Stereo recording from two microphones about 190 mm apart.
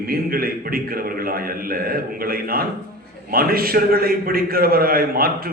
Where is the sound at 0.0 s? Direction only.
50° right (ahead or behind).